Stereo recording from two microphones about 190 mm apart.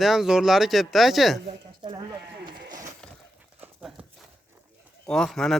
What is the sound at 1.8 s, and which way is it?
Speech, 25° right (ahead or behind).